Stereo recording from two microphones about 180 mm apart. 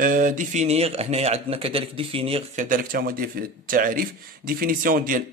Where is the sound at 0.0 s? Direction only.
50° right (ahead or behind); by 2.4 s 30° right (ahead or behind).